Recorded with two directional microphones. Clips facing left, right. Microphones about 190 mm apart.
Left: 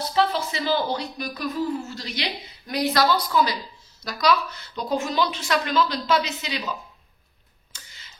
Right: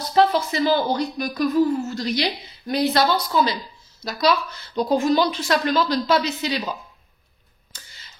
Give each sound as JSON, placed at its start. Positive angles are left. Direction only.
{"t": 0.1, "sound": "speech", "side_deg": -45}